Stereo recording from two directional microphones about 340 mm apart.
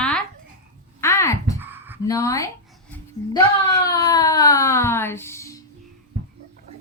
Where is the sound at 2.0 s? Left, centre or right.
Centre.